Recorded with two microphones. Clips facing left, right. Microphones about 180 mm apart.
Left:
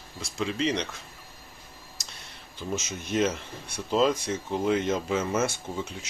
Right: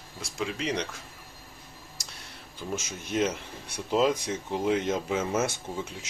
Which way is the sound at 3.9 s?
15° right (ahead or behind).